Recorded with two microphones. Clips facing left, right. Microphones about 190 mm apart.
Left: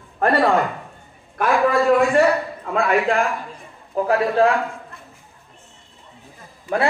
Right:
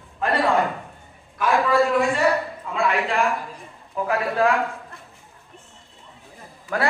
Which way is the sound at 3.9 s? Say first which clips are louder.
Left 5 dB; 35° left (ahead or behind).